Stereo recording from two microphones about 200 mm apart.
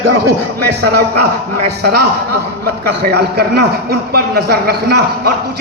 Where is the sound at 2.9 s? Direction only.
55° right (ahead or behind).